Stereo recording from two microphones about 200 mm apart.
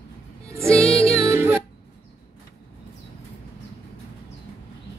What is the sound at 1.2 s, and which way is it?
Music, 10° right (ahead or behind).